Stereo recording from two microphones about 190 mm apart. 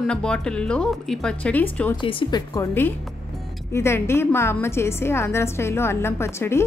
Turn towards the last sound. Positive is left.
turn(degrees=15)  # may be behind; listen again after turning